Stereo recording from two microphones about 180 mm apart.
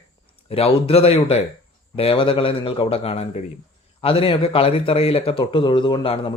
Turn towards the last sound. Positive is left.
turn(degrees=30)  # may be behind; listen again after turning